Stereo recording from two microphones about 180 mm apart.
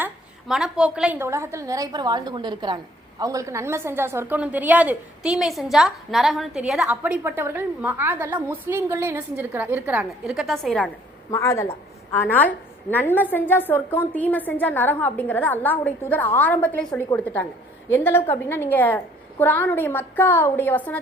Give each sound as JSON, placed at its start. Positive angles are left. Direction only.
{"t": 0.0, "sound": "a woman's voice", "side_deg": -5}
{"t": 11.3, "sound": "a woman's voice", "side_deg": 15}